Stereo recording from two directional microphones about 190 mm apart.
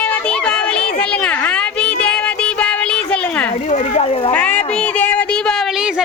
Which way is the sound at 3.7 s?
35° left (ahead or behind).